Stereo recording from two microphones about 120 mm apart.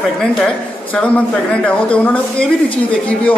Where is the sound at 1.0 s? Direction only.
10° left (ahead or behind).